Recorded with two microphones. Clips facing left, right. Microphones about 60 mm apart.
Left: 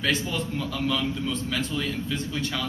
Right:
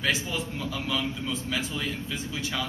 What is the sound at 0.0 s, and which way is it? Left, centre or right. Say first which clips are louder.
A man's voice: left 2 dB; centre.